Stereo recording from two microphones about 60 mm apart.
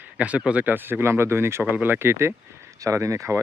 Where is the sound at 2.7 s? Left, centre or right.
Right.